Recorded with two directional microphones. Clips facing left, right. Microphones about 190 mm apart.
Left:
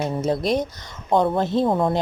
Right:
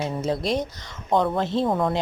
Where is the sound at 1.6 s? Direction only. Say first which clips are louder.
Left 2 dB; 30° left (ahead or behind).